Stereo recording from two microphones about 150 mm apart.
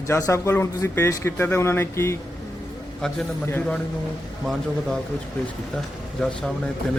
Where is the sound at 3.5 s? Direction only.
10° left (ahead or behind).